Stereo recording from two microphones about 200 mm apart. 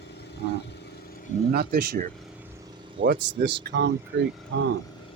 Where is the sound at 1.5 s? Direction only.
50° right (ahead or behind).